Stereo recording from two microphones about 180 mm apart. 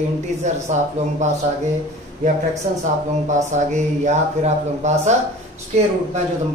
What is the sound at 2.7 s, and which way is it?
Speech, 40° right (ahead or behind).